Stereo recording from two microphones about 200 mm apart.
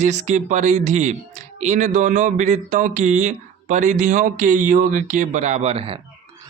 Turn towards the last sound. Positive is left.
turn(degrees=-30)  # may be behind; listen again after turning